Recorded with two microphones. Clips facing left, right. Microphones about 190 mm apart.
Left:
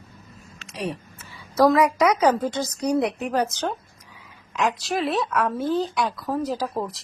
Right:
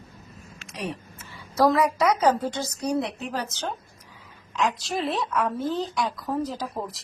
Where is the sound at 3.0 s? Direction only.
60° left (ahead or behind).